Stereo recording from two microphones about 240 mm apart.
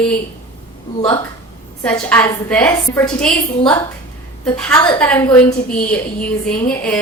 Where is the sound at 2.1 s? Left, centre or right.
Centre.